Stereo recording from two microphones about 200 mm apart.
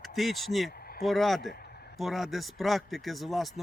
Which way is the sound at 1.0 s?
Centre (ahead or behind).